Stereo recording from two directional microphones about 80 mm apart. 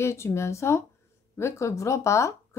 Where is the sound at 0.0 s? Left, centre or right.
Left.